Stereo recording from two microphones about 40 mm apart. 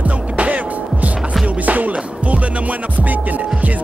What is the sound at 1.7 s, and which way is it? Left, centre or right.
Music, right.